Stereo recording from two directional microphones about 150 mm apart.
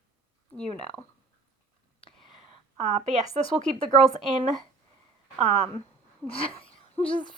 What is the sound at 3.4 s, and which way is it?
Speech, 35° left (ahead or behind).